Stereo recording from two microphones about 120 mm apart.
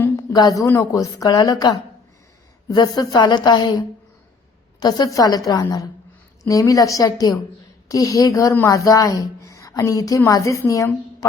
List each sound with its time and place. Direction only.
0.0 s a sound: 30° left (ahead or behind)
0.7 s a woman's voice: 25° left (ahead or behind)
4.8 s a woman's voice: 35° left (ahead or behind)